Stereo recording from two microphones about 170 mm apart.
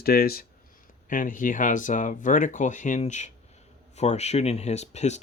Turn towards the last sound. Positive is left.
turn(degrees=40)  # may be behind; listen again after turning